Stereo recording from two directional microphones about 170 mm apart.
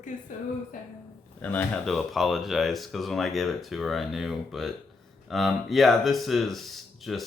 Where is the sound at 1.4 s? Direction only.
10° left (ahead or behind).